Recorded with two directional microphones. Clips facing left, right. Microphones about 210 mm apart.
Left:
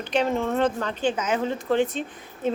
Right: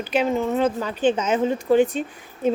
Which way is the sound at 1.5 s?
15° right (ahead or behind).